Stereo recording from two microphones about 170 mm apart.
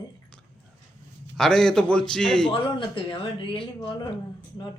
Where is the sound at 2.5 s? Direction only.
30° left (ahead or behind).